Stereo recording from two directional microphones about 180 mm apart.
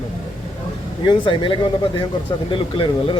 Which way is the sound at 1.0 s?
30° left (ahead or behind).